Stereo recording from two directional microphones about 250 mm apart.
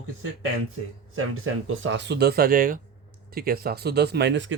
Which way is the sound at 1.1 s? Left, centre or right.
Right.